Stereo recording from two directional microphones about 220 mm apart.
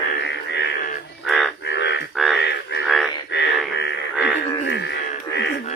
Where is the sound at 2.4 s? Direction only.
50° left (ahead or behind).